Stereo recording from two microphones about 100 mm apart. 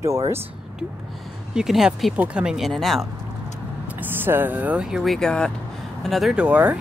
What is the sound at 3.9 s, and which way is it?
Speech, 20° right (ahead or behind).